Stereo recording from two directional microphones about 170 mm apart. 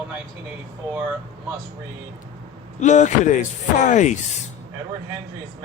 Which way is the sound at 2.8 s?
45° left (ahead or behind).